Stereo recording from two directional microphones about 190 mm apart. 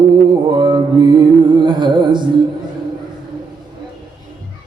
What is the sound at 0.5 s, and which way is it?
Mantra, 25° right (ahead or behind).